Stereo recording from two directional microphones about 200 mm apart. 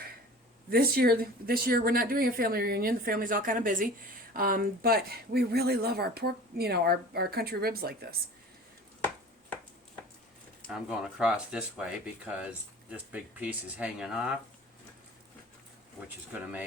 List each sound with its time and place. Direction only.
0.7 s speech: 50° right (ahead or behind)
10.6 s speech: 5° right (ahead or behind)
16.0 s speech: 10° right (ahead or behind)